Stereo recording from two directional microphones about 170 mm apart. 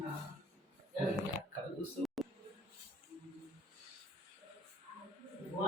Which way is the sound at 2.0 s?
Centre (ahead or behind).